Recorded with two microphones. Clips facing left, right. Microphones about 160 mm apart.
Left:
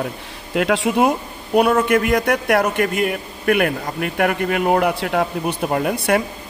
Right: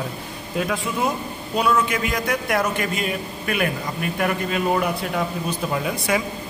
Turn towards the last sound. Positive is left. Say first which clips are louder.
# left 5 dB
turn(degrees=55)  # may be behind; listen again after turning